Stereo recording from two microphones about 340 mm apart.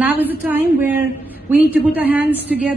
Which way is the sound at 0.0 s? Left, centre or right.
Centre.